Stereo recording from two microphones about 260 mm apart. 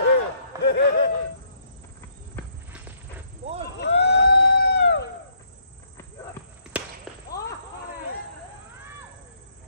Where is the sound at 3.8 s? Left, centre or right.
Left.